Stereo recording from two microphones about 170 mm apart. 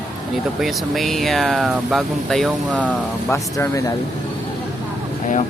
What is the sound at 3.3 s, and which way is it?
Speech, 20° left (ahead or behind).